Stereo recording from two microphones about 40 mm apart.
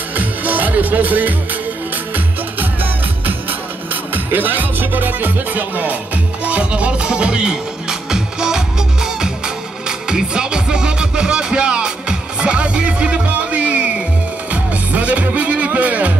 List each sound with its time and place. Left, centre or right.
0.1 s music: right
6.4 s music: right